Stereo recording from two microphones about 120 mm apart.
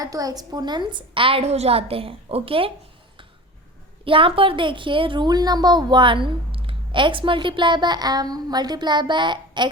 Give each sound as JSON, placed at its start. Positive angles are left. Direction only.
{"t": 0.0, "sound": "a woman's voice", "side_deg": -30}
{"t": 4.0, "sound": "a woman's voice", "side_deg": -45}